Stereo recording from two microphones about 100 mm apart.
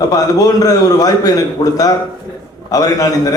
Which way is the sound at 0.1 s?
40° left (ahead or behind).